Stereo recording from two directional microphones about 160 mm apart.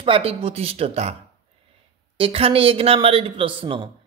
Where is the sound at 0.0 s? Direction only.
35° right (ahead or behind).